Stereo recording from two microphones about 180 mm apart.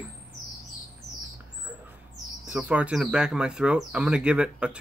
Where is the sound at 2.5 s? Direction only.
5° right (ahead or behind).